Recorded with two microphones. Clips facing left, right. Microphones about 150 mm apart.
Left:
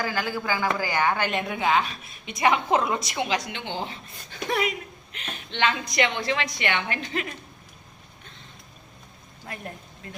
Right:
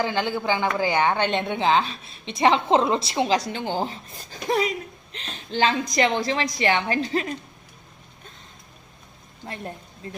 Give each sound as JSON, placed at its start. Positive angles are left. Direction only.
{"t": 0.0, "sound": "a woman's voice", "side_deg": -25}